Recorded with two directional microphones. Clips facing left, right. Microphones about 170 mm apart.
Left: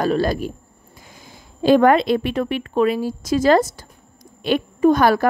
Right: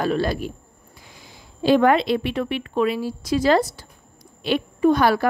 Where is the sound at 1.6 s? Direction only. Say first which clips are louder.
Left 3 dB; 45° left (ahead or behind).